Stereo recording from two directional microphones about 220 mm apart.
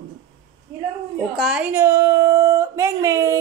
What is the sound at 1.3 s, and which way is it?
Speech, 5° right (ahead or behind).